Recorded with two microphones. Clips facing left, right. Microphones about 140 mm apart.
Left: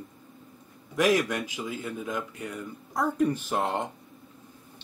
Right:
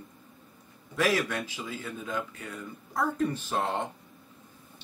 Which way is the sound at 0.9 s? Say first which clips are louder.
Left 3 dB; 15° left (ahead or behind).